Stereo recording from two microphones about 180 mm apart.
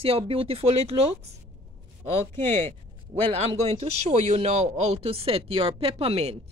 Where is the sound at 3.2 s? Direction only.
35° right (ahead or behind).